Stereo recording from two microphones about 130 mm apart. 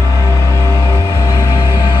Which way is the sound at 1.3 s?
30° left (ahead or behind).